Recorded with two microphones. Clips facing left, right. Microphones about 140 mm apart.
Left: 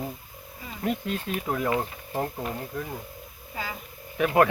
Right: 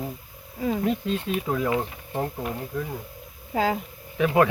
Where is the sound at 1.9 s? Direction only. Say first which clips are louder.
Right 1 dB; 15° right (ahead or behind).